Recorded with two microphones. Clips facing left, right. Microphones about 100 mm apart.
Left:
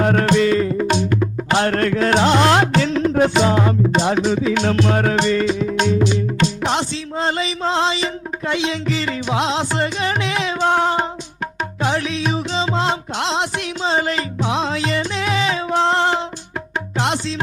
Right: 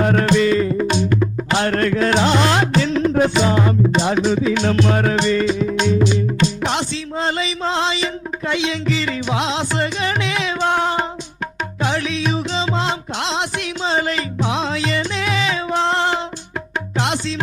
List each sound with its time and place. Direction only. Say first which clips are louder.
0.0 s music: even; 50° left (ahead or behind)
0.9 s music: even; 70° left (ahead or behind)
1.2 s music: left 1 dB; 50° left (ahead or behind); by 5.6 s 65° left (ahead or behind)
5.6 s music: even; 50° left (ahead or behind)
6.0 s music: right 1 dB; 70° left (ahead or behind)
6.7 s music: left 1 dB; 35° left (ahead or behind)